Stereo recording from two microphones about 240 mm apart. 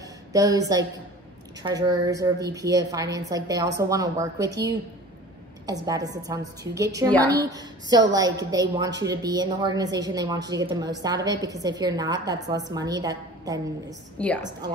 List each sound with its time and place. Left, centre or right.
0.3 s a woman's voice: centre
14.1 s a woman's voice: centre